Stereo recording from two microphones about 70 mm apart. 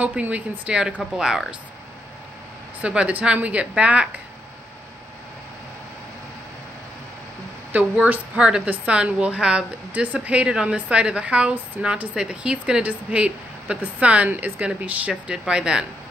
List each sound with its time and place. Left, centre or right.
0.0 s speech: centre
2.8 s speech: centre
7.7 s speech: right